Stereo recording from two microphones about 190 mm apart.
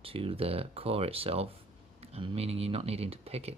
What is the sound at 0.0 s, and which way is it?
Speech, 30° right (ahead or behind).